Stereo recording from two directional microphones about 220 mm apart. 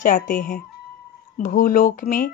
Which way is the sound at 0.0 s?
40° left (ahead or behind).